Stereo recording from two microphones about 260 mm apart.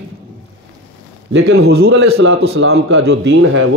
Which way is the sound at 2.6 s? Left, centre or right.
Right.